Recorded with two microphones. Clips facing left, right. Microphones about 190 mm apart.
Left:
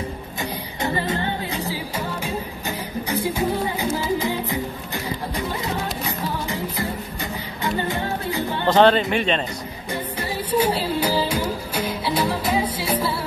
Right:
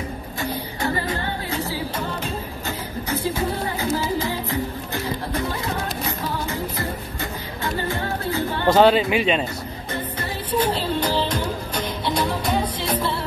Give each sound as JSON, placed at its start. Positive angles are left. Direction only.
{"t": 0.4, "sound": "music", "side_deg": 20}
{"t": 8.6, "sound": "speech", "side_deg": -5}
{"t": 10.5, "sound": "a sound", "side_deg": 10}
{"t": 11.7, "sound": "music", "side_deg": 5}